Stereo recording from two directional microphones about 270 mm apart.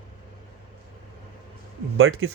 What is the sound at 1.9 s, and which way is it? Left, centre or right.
Speech, right.